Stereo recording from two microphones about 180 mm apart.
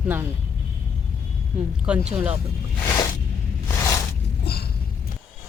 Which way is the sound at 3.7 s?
15° left (ahead or behind).